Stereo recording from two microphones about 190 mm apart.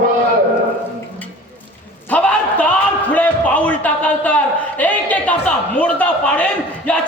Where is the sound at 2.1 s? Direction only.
5° left (ahead or behind).